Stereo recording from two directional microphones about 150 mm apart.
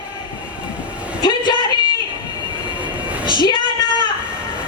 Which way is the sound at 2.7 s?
10° right (ahead or behind).